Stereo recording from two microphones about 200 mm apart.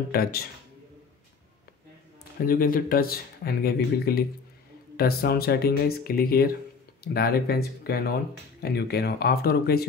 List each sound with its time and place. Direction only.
0.1 s speech: 50° left (ahead or behind)
2.4 s speech: 45° left (ahead or behind)